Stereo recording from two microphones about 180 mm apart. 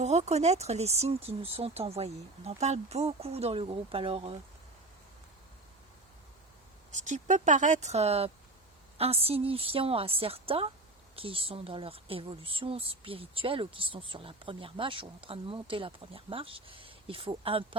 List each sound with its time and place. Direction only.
0.0 s speech: 35° right (ahead or behind)
6.9 s speech: 45° right (ahead or behind)